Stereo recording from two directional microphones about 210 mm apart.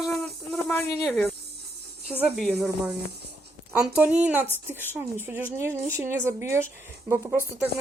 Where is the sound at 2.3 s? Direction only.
Centre (ahead or behind).